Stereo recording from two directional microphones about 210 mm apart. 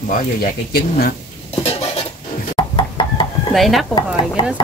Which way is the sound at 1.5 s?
30° left (ahead or behind).